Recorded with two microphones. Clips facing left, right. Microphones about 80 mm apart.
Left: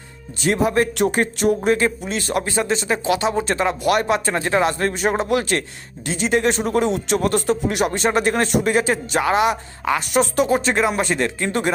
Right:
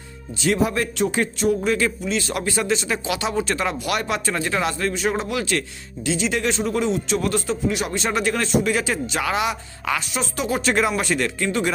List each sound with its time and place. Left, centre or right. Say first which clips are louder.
0.4 s speech: left 3 dB; left
0.9 s speech: left 3 dB; left
1.6 s speech: left 3 dB; left
2.4 s speech: left 1 dB; left
7.5 s speech: left 3 dB; left
7.9 s speech: left 4 dB; left
10.1 s speech: left 8 dB; left
10.8 s speech: left 2 dB; left